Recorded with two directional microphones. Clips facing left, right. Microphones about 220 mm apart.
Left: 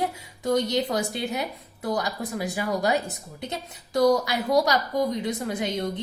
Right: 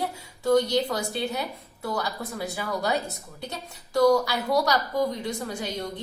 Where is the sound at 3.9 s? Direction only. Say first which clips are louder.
Even; 20° left (ahead or behind).